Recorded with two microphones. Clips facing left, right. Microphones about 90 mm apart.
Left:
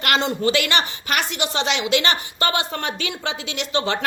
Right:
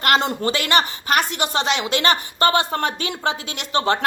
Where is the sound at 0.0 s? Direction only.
45° right (ahead or behind).